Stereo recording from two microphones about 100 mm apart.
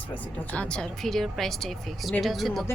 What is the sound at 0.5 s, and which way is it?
Speech, 10° left (ahead or behind).